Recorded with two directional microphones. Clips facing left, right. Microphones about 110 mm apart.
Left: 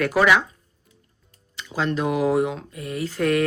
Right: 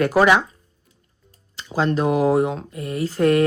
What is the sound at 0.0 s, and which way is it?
Speech, 35° right (ahead or behind).